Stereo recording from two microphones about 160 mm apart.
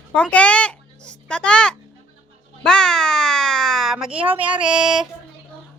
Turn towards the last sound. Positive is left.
turn(degrees=-5)  # may be behind; listen again after turning